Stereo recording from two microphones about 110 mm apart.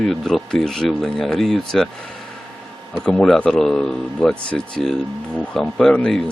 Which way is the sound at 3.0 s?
5° left (ahead or behind).